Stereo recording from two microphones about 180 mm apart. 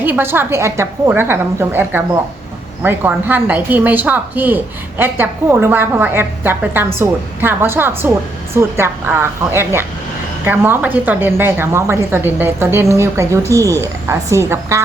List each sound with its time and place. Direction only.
0.0 s a woman's voice: 10° right (ahead or behind)